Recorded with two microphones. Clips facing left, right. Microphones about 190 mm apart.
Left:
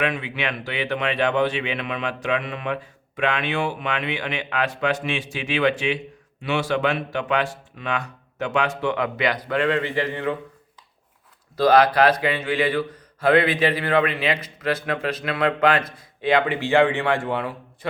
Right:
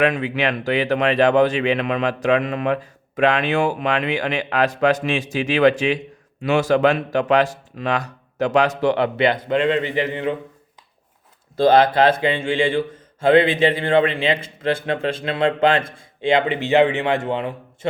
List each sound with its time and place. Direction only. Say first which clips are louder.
0.0 s speech: right 6 dB; 40° right (ahead or behind); by 10.3 s 20° right (ahead or behind)
11.5 s speech: right 2 dB; 25° right (ahead or behind)